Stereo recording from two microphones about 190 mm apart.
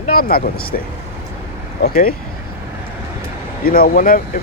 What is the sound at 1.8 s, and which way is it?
Speech, 50° left (ahead or behind).